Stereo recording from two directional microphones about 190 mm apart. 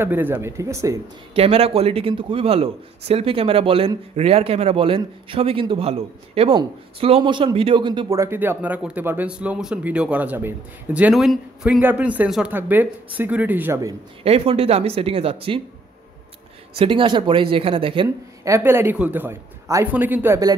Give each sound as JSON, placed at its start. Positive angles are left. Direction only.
{"t": 0.0, "sound": "a man's voice", "side_deg": -10}
{"t": 1.3, "sound": "a man's voice", "side_deg": -30}
{"t": 14.2, "sound": "speech", "side_deg": -30}
{"t": 16.7, "sound": "a man's voice", "side_deg": -25}
{"t": 18.4, "sound": "a man's voice", "side_deg": -15}